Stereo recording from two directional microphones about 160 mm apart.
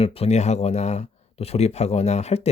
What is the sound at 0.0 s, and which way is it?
Speech, 40° left (ahead or behind).